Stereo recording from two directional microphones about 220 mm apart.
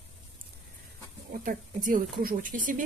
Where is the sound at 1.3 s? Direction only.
40° right (ahead or behind).